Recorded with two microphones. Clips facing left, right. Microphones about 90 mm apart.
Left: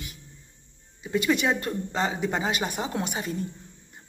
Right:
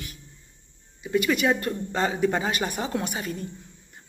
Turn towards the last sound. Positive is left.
turn(degrees=20)  # may be behind; listen again after turning